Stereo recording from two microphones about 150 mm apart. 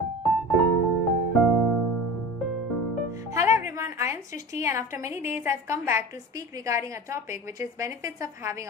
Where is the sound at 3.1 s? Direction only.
20° right (ahead or behind).